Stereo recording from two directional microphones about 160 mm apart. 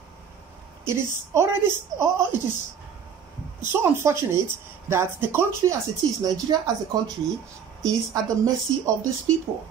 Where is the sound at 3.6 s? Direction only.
15° right (ahead or behind).